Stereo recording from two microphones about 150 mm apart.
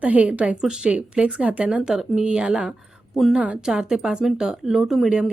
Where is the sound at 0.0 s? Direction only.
10° right (ahead or behind).